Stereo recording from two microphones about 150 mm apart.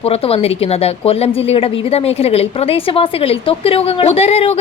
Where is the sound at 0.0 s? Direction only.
40° left (ahead or behind).